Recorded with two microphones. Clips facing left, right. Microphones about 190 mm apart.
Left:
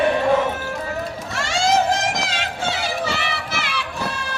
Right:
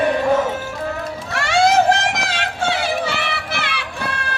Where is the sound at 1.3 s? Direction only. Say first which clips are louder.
Right 5 dB; 60° right (ahead or behind).